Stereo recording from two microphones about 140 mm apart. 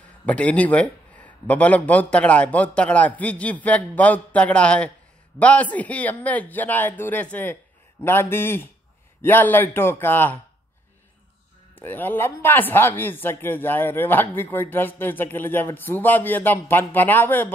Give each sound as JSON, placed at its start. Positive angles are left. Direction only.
{"t": 0.2, "sound": "speech", "side_deg": 10}
{"t": 11.8, "sound": "speech", "side_deg": 15}